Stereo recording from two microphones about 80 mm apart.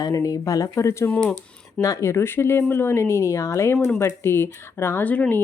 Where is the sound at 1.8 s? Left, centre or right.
Left.